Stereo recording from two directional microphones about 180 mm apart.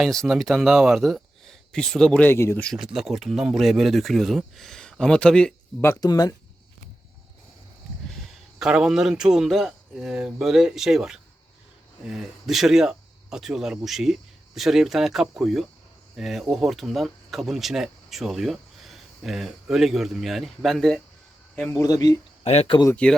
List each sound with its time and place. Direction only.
0.0 s speech: centre (ahead or behind)
2.7 s speech: centre (ahead or behind)
5.8 s speech: 15° left (ahead or behind)
8.5 s speech: 5° right (ahead or behind)
21.8 s speech: 20° left (ahead or behind)
22.4 s speech: 35° left (ahead or behind)
22.9 s speech: 5° left (ahead or behind)